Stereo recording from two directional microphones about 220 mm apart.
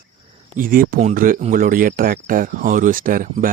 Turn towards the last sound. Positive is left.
turn(degrees=-40)  # may be behind; listen again after turning